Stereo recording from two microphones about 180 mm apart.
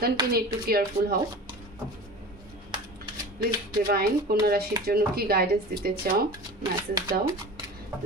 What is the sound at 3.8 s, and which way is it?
Speech, 55° right (ahead or behind).